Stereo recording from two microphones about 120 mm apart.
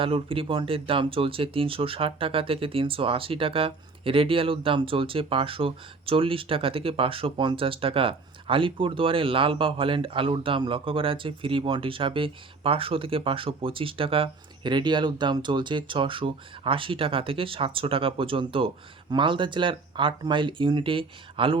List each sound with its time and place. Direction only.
0.0 s speech: 50° right (ahead or behind)